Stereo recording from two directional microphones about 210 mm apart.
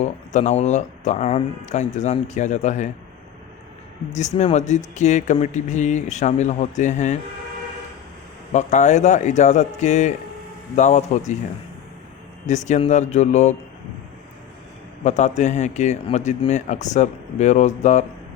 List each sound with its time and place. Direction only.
0.0 s speech: 35° left (ahead or behind)
4.1 s speech: 35° left (ahead or behind)
8.5 s speech: 35° left (ahead or behind)
12.5 s speech: 35° left (ahead or behind)
15.0 s speech: 35° left (ahead or behind)